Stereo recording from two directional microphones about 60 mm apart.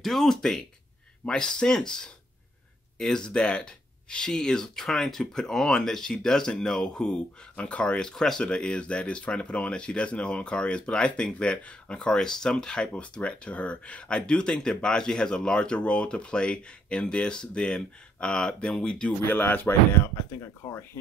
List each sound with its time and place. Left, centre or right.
0.0 s speech: centre
19.2 s speech: left